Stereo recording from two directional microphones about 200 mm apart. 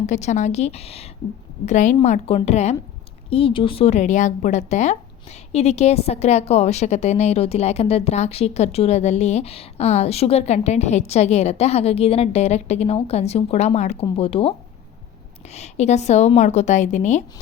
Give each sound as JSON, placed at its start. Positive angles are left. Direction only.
{"t": 0.0, "sound": "speech", "side_deg": 35}